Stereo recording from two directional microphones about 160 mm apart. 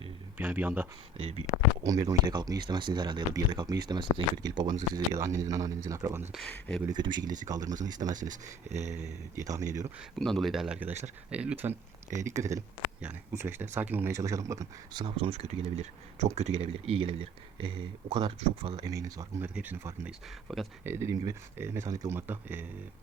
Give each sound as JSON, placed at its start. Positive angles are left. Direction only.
{"t": 0.3, "sound": "speech", "side_deg": -10}
{"t": 1.1, "sound": "speech", "side_deg": -40}
{"t": 1.8, "sound": "speech", "side_deg": -20}
{"t": 6.3, "sound": "speech", "side_deg": 5}
{"t": 6.8, "sound": "speech", "side_deg": -25}
{"t": 8.1, "sound": "speech", "side_deg": -55}
{"t": 9.3, "sound": "speech", "side_deg": -20}
{"t": 10.2, "sound": "speech", "side_deg": 5}
{"t": 18.7, "sound": "speech", "side_deg": -20}
{"t": 19.5, "sound": "speech", "side_deg": -10}
{"t": 20.5, "sound": "speech", "side_deg": 0}
{"t": 20.8, "sound": "speech", "side_deg": -15}